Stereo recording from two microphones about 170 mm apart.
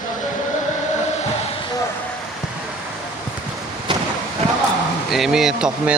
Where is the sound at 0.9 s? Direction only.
40° left (ahead or behind).